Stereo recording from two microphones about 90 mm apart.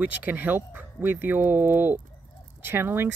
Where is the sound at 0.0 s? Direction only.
20° right (ahead or behind).